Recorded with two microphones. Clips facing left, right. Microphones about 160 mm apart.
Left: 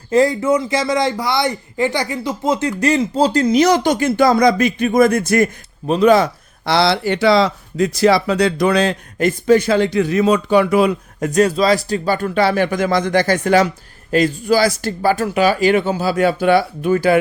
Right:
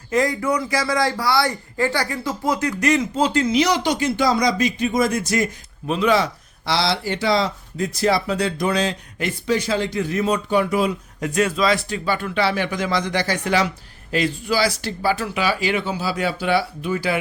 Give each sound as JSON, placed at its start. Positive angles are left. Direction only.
{"t": 0.1, "sound": "speech", "side_deg": 30}
{"t": 5.9, "sound": "speech", "side_deg": 45}
{"t": 11.2, "sound": "speech", "side_deg": 40}